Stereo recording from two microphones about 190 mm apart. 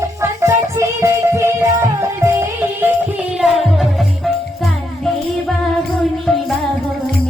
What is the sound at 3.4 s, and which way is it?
Music, centre (ahead or behind).